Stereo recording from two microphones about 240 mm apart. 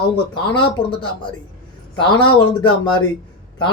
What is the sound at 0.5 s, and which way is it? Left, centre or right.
Speech, centre.